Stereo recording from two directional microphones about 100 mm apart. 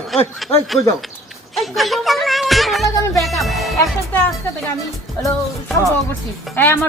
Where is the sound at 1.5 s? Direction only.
Centre (ahead or behind).